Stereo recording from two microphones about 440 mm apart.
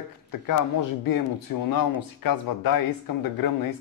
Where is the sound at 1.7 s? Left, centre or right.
Left.